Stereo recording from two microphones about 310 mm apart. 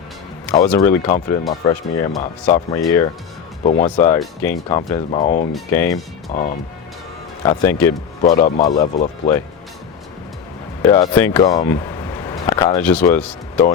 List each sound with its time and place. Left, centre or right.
0.7 s speech: centre; by 5.5 s left
5.5 s speech: centre
6.3 s speech: left
7.4 s speech: centre
8.2 s speech: left
10.8 s speech: centre